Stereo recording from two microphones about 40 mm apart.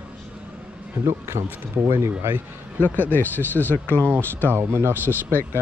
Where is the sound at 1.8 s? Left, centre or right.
Right.